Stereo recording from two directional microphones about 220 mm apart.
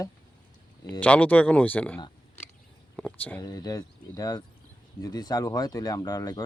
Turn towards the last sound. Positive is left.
turn(degrees=15)  # may be behind; listen again after turning